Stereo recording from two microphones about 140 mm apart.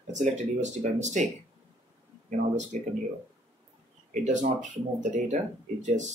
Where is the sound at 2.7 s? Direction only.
60° right (ahead or behind).